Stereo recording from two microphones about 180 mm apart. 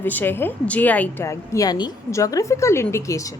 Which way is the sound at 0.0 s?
10° left (ahead or behind).